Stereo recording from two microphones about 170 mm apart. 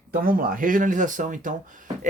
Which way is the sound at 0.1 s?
55° right (ahead or behind).